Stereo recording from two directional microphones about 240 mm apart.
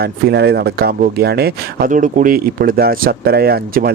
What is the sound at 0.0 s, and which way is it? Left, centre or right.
Speech, right.